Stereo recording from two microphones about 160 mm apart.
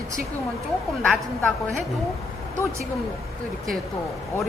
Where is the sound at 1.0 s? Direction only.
5° left (ahead or behind).